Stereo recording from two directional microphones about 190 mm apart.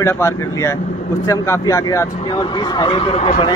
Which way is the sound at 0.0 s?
15° left (ahead or behind).